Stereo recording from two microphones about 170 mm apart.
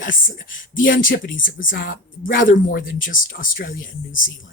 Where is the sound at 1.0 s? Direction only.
55° left (ahead or behind).